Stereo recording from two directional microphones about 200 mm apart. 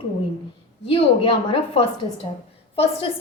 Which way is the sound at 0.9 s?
25° left (ahead or behind).